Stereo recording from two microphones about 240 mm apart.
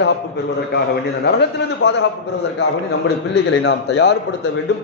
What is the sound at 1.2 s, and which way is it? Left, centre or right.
Speech, left.